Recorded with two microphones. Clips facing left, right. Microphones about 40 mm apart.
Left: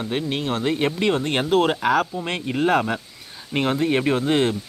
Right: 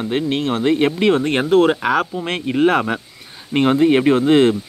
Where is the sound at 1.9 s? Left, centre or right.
Right.